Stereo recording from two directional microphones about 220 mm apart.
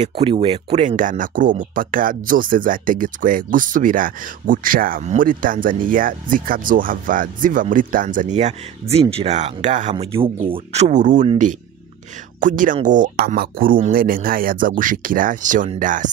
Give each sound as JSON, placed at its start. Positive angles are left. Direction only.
{"t": 0.0, "sound": "speech", "side_deg": -25}